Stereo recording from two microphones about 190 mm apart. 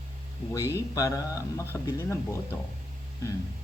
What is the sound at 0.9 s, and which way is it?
Speech, 15° left (ahead or behind).